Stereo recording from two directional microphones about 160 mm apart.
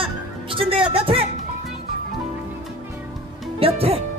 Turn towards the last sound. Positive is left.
turn(degrees=-35)  # may be behind; listen again after turning